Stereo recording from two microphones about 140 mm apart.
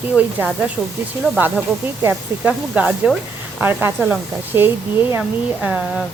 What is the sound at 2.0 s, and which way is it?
Speech, 10° right (ahead or behind).